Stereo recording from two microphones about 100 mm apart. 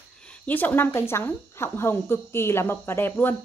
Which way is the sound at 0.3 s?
15° left (ahead or behind).